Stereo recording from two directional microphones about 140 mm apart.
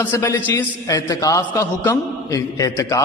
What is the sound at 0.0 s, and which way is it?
A man's voice, 20° left (ahead or behind).